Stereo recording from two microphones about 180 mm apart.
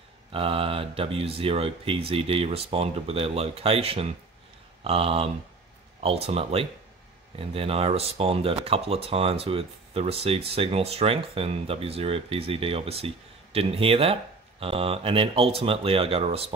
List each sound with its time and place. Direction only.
0.3 s speech: 30° right (ahead or behind)